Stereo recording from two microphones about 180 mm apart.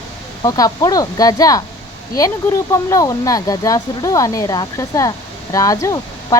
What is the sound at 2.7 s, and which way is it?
Speech, 20° left (ahead or behind).